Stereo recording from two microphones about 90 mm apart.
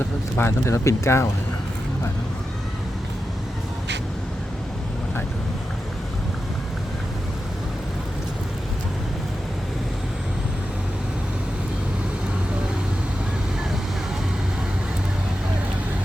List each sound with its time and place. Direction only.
0.3 s speech: 30° left (ahead or behind)